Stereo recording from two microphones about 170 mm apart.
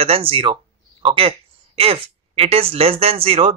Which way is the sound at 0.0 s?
35° right (ahead or behind).